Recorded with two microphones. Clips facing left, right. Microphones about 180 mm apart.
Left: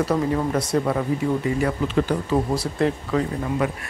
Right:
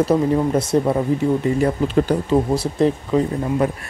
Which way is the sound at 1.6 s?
35° right (ahead or behind).